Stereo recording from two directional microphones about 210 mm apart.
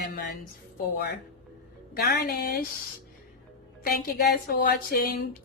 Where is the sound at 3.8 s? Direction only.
45° left (ahead or behind).